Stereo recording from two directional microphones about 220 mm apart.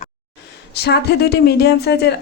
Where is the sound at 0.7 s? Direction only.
50° left (ahead or behind).